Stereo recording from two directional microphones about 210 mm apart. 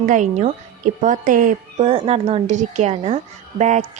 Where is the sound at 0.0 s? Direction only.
35° right (ahead or behind).